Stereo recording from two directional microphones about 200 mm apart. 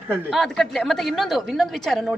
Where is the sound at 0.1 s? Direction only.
Centre (ahead or behind).